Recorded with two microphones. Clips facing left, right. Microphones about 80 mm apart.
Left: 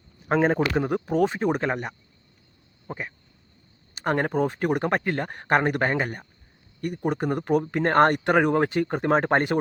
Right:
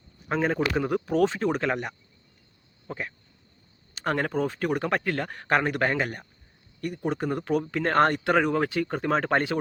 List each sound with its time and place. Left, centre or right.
0.3 s speech: left; by 1.7 s centre
2.8 s speech: centre